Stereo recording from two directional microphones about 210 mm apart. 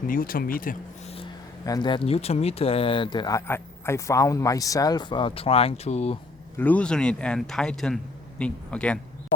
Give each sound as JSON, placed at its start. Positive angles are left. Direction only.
{"t": 0.1, "sound": "speech", "side_deg": 40}
{"t": 1.1, "sound": "speech", "side_deg": 20}
{"t": 6.6, "sound": "speech", "side_deg": 5}